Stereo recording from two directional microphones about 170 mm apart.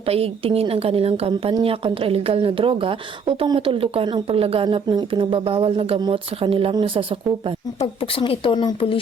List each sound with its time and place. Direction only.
0.0 s a woman's voice: 35° right (ahead or behind)
8.1 s speech: 30° left (ahead or behind)